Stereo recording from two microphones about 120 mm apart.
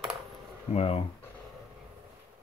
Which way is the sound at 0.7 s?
55° left (ahead or behind).